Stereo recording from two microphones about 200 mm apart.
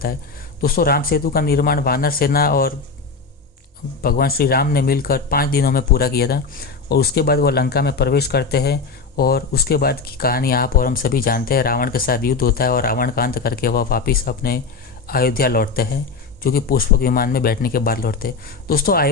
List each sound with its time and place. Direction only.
0.6 s speech: 50° left (ahead or behind)
4.0 s speech: 50° left (ahead or behind)